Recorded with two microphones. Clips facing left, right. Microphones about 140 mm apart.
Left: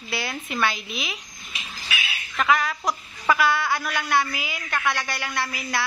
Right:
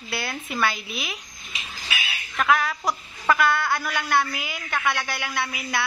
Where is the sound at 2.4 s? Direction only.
Centre (ahead or behind).